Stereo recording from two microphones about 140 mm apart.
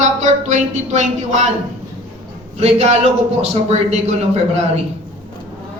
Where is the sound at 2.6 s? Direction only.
50° right (ahead or behind).